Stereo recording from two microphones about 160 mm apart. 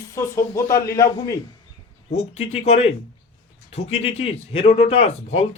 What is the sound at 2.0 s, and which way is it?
A man's voice, 40° left (ahead or behind).